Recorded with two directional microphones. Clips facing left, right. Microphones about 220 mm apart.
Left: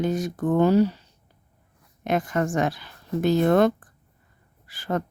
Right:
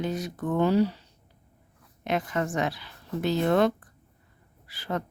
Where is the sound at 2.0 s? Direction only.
45° left (ahead or behind).